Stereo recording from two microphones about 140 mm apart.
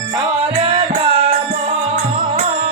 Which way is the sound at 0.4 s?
40° right (ahead or behind).